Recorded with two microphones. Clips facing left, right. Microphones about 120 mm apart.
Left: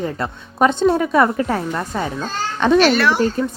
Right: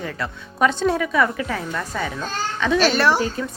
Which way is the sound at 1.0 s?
40° left (ahead or behind).